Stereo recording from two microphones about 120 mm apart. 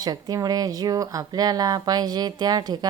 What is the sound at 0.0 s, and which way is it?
Speech, 30° right (ahead or behind).